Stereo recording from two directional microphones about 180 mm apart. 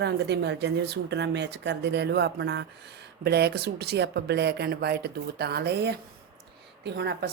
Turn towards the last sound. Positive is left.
turn(degrees=-65)  # may be behind; listen again after turning